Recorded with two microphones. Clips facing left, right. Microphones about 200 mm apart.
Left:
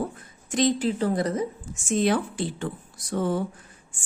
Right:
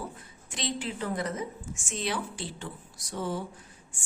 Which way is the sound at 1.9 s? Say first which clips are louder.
Left 10 dB; 50° left (ahead or behind).